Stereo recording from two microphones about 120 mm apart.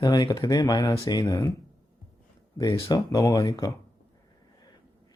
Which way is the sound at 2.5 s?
35° left (ahead or behind).